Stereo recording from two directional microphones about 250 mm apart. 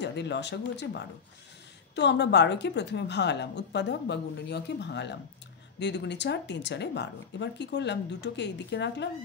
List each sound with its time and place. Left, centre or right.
0.0 s speech: left